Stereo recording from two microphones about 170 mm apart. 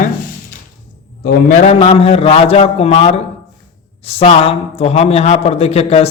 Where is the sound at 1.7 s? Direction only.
35° left (ahead or behind).